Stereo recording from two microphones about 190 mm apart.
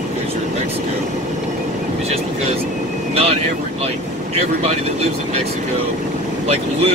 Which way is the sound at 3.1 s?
30° right (ahead or behind).